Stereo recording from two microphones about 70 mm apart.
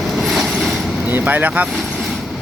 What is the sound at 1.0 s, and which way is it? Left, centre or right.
Speech, right.